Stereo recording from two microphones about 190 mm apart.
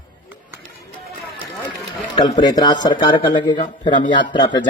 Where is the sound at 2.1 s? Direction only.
25° left (ahead or behind).